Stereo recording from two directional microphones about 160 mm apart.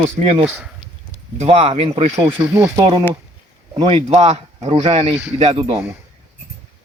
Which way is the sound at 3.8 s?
40° right (ahead or behind).